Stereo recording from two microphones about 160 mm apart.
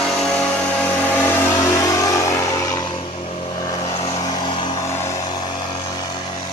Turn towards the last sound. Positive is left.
turn(degrees=30)  # may be behind; listen again after turning